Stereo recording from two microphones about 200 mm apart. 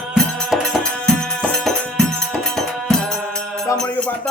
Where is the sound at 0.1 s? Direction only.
Centre (ahead or behind).